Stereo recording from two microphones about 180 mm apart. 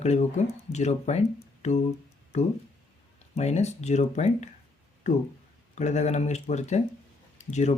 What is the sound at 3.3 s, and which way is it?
Speech, 40° left (ahead or behind).